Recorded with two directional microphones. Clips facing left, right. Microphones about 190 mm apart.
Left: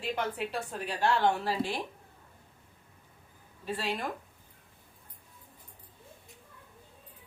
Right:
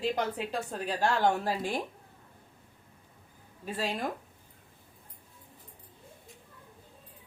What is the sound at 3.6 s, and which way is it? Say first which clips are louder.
Speech: right 1 dB; 45° right (ahead or behind).